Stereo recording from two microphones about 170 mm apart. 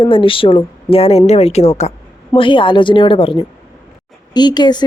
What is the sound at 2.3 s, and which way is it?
A woman's voice, 30° left (ahead or behind).